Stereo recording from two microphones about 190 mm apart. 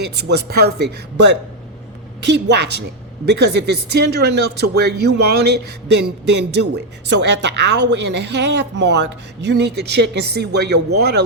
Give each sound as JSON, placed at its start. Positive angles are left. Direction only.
{"t": 0.0, "sound": "speech", "side_deg": -60}